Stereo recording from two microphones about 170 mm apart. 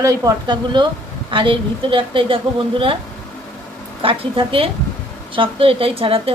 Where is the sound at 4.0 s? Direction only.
30° right (ahead or behind).